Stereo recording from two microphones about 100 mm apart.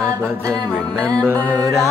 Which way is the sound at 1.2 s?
25° right (ahead or behind).